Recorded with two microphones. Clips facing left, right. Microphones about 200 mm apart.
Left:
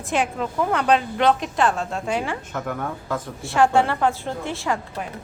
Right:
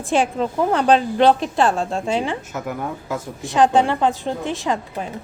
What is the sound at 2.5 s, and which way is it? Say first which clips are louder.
A woman's voice: right 1 dB; 5° right (ahead or behind).